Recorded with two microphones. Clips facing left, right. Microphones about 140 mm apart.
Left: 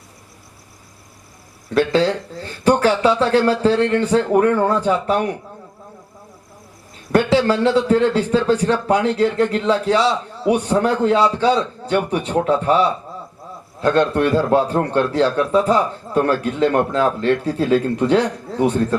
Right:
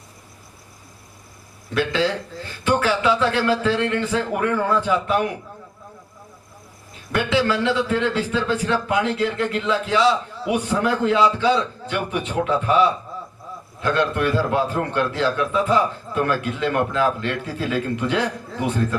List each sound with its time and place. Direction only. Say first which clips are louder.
1.7 s a man's voice: left 5 dB; 35° left (ahead or behind)
7.1 s a man's voice: left 5 dB; 40° left (ahead or behind)
13.8 s a man's voice: left 5 dB; 35° left (ahead or behind)